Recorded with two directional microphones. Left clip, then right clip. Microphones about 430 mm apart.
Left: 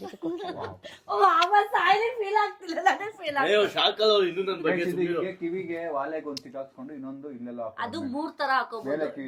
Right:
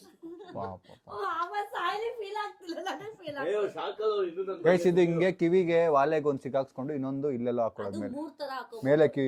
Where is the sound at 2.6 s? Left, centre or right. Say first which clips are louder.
Left 11 dB; centre.